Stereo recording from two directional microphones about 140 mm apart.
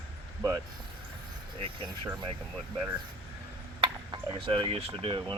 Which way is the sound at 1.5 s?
40° right (ahead or behind).